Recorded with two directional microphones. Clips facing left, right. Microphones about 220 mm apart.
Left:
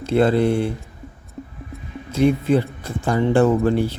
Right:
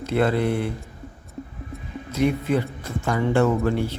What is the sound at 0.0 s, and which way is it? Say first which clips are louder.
Speech: left 5 dB; 30° left (ahead or behind).